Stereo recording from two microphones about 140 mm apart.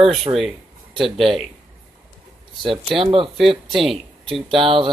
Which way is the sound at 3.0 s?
40° right (ahead or behind).